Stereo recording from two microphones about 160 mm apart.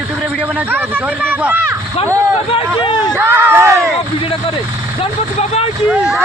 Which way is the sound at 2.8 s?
25° left (ahead or behind).